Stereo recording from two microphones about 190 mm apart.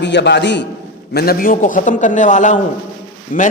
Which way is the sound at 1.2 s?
50° left (ahead or behind).